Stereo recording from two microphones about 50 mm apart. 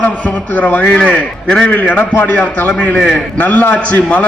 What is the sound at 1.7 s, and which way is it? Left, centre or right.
A man's voice, left.